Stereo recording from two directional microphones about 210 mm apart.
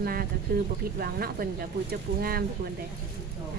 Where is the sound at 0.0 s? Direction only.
45° right (ahead or behind).